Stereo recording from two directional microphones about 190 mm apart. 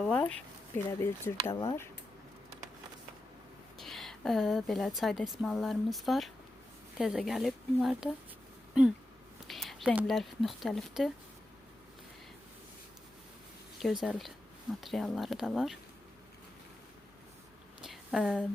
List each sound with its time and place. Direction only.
0.0 s speech: 5° left (ahead or behind)
1.5 s speech: 30° left (ahead or behind)
3.8 s a woman's voice: centre (ahead or behind)
9.5 s speech: centre (ahead or behind)
13.8 s a woman's voice: centre (ahead or behind)
17.8 s a sound: centre (ahead or behind)